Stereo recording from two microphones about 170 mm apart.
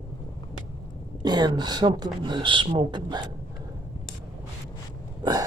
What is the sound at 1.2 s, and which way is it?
Speech, 25° right (ahead or behind).